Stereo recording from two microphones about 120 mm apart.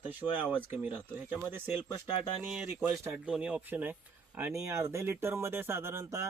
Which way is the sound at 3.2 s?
10° right (ahead or behind).